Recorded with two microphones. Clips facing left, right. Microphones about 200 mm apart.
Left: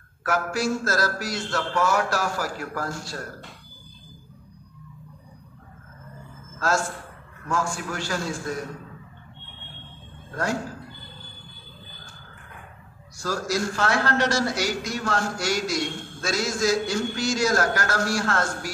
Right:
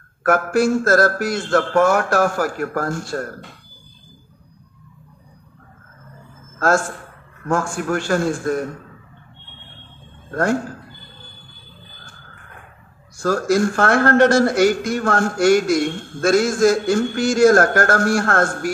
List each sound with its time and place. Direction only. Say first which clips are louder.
0.2 s a man's voice: right 9 dB; 55° right (ahead or behind)
6.6 s a man's voice: right 7 dB; 55° right (ahead or behind)
10.3 s a man's voice: right 8 dB; 55° right (ahead or behind)
13.2 s a man's voice: right 9 dB; 55° right (ahead or behind)